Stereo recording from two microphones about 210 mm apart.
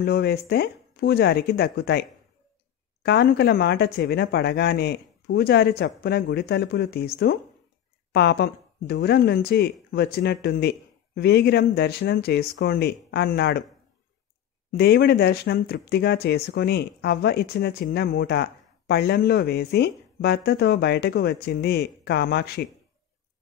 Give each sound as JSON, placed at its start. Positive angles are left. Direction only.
{"t": 0.0, "sound": "speech", "side_deg": 50}
{"t": 14.7, "sound": "speech", "side_deg": 50}